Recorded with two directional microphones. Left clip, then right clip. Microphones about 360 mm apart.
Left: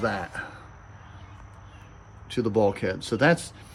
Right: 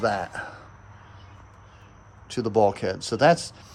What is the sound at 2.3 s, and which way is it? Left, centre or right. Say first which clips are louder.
A man's voice: right 2 dB; centre.